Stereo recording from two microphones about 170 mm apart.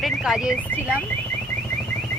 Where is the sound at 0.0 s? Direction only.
5° right (ahead or behind).